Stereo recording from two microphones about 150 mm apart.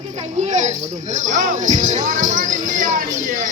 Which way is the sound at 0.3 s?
55° right (ahead or behind).